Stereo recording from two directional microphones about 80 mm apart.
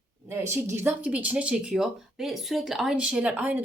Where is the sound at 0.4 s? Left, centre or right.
Right.